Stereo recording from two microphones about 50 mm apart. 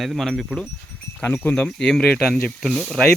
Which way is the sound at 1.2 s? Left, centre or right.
Left.